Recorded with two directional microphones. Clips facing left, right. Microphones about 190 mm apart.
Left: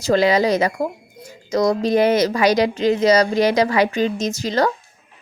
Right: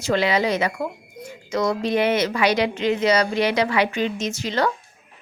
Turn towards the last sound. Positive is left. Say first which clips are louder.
# left 4 dB
turn(degrees=40)  # may be behind; listen again after turning